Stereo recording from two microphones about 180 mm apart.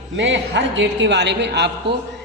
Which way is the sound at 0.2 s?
75° right (ahead or behind).